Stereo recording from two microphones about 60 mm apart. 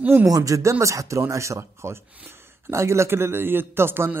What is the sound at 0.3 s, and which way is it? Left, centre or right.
Speech, right.